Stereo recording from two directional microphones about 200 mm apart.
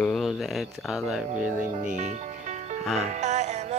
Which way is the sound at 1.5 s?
40° right (ahead or behind).